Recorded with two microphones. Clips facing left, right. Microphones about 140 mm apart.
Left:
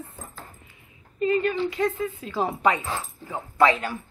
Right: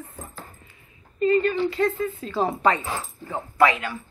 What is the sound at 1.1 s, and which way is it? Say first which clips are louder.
Speech: right 3 dB; 10° left (ahead or behind).